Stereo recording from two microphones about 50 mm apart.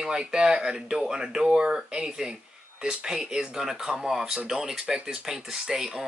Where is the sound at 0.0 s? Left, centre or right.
Centre.